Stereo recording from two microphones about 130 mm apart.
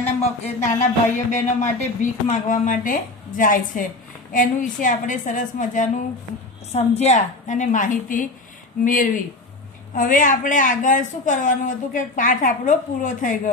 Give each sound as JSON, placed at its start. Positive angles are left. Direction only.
{"t": 0.2, "sound": "speech", "side_deg": 60}
{"t": 6.7, "sound": "speech", "side_deg": 55}